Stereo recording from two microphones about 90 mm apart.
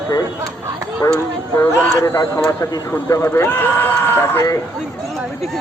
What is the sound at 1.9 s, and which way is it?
Speech, 35° left (ahead or behind).